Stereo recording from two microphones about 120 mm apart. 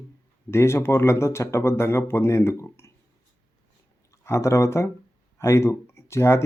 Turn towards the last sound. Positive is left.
turn(degrees=20)  # may be behind; listen again after turning